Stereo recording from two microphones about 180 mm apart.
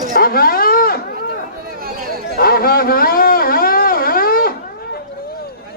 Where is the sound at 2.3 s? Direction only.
55° left (ahead or behind).